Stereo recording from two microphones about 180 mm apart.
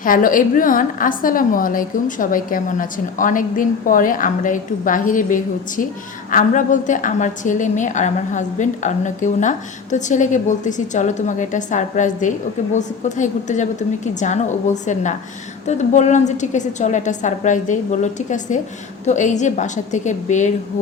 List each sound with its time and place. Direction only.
0.0 s a woman's voice: 50° left (ahead or behind)